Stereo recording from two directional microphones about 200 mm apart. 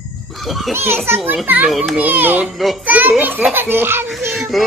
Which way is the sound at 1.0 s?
10° right (ahead or behind).